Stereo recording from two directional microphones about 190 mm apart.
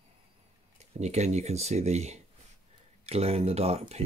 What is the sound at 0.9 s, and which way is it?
Speech, 35° right (ahead or behind).